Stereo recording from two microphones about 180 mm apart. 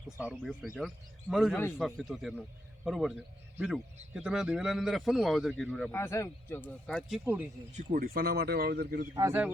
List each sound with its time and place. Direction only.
0.2 s a man's voice: 5° right (ahead or behind)
4.1 s a man's voice: 5° right (ahead or behind)
5.9 s a man's voice: 15° left (ahead or behind)
7.8 s speech: 50° right (ahead or behind)
9.1 s speech: 15° right (ahead or behind)